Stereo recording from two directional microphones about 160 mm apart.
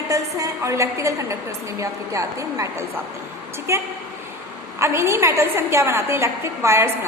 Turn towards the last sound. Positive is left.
turn(degrees=-15)  # may be behind; listen again after turning